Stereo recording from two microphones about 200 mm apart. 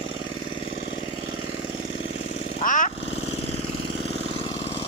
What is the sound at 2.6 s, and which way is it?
Lawn mower, 40° left (ahead or behind).